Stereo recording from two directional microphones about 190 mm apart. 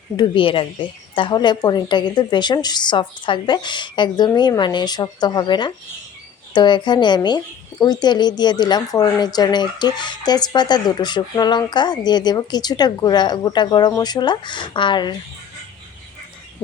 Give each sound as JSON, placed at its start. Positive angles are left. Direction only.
{"t": 0.2, "sound": "a woman's voice", "side_deg": 25}